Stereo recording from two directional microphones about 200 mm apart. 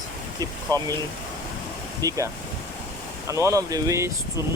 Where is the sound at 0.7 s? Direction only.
20° right (ahead or behind).